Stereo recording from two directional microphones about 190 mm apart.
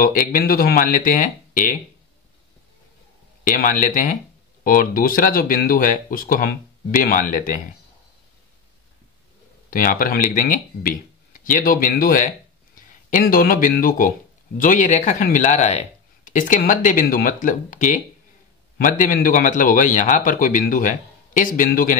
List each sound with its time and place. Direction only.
0.0 s speech: 45° left (ahead or behind)
3.4 s speech: 45° left (ahead or behind)
9.7 s speech: 50° left (ahead or behind)